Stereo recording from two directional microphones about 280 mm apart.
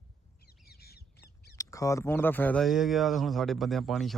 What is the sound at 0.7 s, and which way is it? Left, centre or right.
Squawk, left.